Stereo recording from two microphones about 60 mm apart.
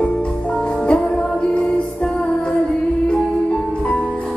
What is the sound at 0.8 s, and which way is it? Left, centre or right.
Music, centre.